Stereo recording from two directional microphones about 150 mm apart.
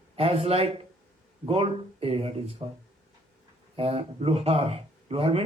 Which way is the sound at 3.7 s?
40° right (ahead or behind).